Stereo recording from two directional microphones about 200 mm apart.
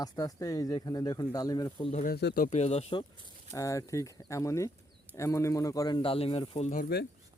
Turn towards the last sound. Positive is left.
turn(degrees=35)  # may be behind; listen again after turning